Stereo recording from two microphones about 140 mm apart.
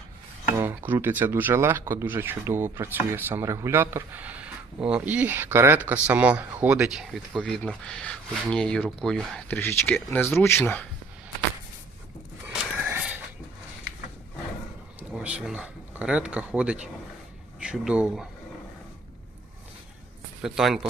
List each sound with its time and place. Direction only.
0.5 s speech: 15° right (ahead or behind); by 9.6 s 5° left (ahead or behind)
9.6 s speech: 15° left (ahead or behind)
12.5 s wheeze: 10° right (ahead or behind)
15.1 s speech: 5° right (ahead or behind)
20.4 s speech: 5° right (ahead or behind)